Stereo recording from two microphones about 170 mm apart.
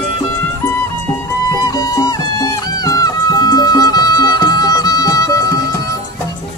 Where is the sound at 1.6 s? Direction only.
20° left (ahead or behind).